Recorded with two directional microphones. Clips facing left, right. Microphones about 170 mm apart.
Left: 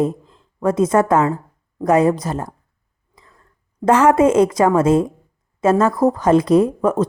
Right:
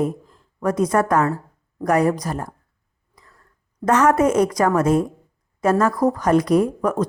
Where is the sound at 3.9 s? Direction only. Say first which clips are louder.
Left 3 dB; 25° left (ahead or behind).